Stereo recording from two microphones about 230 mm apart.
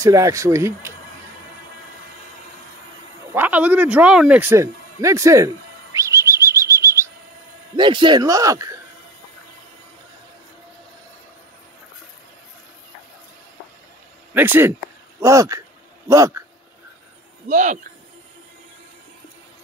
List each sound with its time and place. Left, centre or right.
0.0 s speech: centre
3.3 s speech: centre
5.9 s bird flight: centre
7.7 s speech: right
14.3 s speech: centre
17.5 s speech: right